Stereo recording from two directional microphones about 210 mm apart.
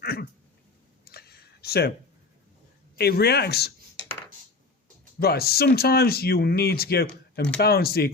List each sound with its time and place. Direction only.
0.0 s a sound: 50° left (ahead or behind)
3.0 s speech: 50° left (ahead or behind)
5.2 s speech: 45° left (ahead or behind)